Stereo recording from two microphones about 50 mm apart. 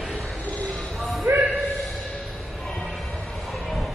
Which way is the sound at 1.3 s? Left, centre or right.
Right.